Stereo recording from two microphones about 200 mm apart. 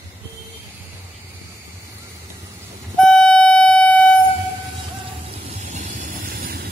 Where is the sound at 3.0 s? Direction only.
5° left (ahead or behind).